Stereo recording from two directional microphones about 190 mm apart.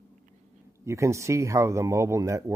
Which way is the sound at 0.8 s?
15° right (ahead or behind).